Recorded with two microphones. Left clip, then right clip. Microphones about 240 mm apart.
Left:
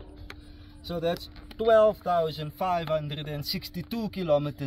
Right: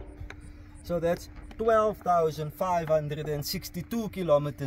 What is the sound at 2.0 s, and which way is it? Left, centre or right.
Speech, centre.